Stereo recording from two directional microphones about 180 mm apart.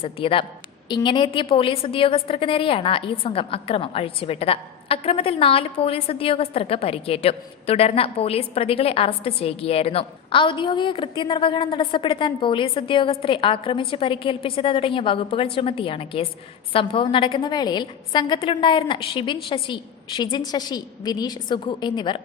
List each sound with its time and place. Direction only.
0.0 s a woman's voice: 30° left (ahead or behind)